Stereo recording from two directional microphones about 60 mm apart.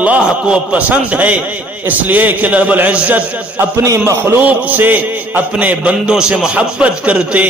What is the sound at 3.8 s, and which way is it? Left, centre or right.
Speech, right.